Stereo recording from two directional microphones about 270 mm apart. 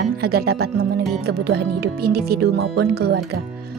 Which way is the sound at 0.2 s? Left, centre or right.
Right.